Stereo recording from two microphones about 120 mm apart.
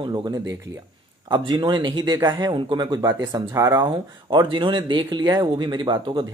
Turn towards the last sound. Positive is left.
turn(degrees=-40)  # may be behind; listen again after turning